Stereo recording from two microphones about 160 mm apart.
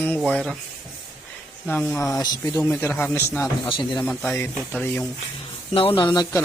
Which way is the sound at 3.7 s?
30° left (ahead or behind).